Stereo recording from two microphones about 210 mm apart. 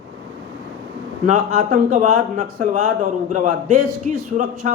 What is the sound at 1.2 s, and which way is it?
A man's voice, 35° right (ahead or behind).